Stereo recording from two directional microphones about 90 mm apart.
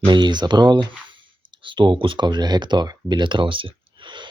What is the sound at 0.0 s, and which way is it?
Speech, 60° right (ahead or behind).